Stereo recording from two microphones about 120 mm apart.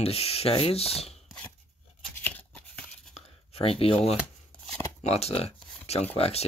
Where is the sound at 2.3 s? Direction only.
10° left (ahead or behind).